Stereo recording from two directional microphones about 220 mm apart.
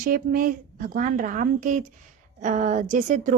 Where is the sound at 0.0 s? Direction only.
40° right (ahead or behind).